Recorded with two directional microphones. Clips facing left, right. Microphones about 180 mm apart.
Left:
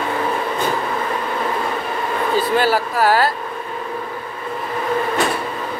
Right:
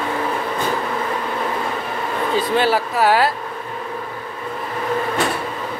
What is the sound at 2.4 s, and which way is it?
Speech, centre (ahead or behind).